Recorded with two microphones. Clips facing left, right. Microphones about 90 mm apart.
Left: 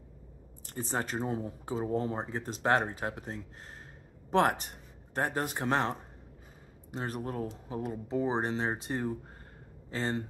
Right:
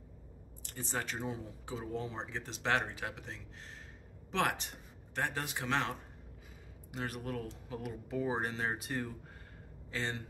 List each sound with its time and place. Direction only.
0.7 s a man's voice: 35° left (ahead or behind)